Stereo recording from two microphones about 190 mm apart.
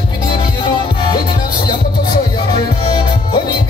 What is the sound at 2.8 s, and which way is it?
Music, 25° left (ahead or behind).